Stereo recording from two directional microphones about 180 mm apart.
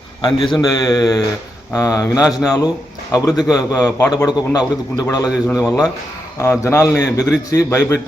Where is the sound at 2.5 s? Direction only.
20° left (ahead or behind).